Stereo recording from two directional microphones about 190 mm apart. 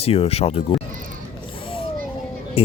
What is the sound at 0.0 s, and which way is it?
Speech, 30° left (ahead or behind).